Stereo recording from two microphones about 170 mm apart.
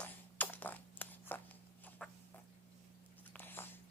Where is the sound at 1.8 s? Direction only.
10° left (ahead or behind).